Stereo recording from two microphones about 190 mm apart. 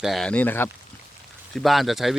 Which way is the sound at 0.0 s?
Centre (ahead or behind).